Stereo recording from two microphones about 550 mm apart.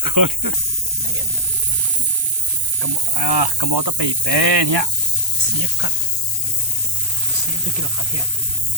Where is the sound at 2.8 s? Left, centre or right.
Right.